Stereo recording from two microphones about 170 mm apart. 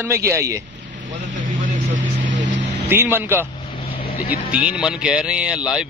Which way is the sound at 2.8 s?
10° right (ahead or behind).